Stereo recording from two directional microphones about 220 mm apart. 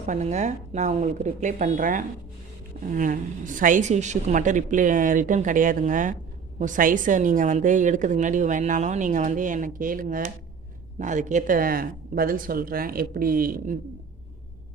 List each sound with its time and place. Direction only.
0.0 s a woman's voice: 35° right (ahead or behind)